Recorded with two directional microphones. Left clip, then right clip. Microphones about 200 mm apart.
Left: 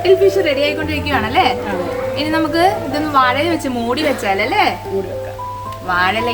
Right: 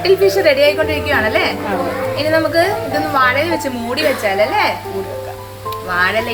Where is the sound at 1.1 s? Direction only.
35° left (ahead or behind).